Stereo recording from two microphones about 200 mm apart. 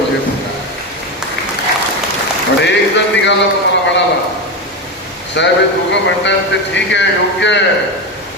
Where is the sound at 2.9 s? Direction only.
60° left (ahead or behind).